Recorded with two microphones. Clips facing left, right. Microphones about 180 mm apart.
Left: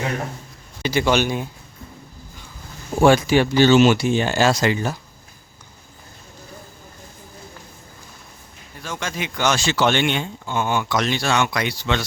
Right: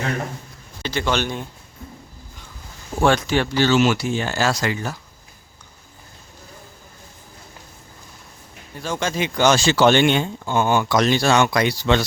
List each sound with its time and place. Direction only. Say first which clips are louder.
0.8 s a man's voice: left 4 dB; 10° left (ahead or behind)
3.0 s speech: left 4 dB; 10° left (ahead or behind)
8.8 s speech: right 5 dB; 30° right (ahead or behind)